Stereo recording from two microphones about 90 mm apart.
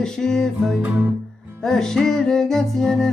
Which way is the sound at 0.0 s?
5° left (ahead or behind).